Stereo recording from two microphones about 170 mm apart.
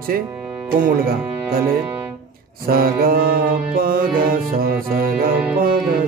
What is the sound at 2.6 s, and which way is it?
Music, 60° right (ahead or behind).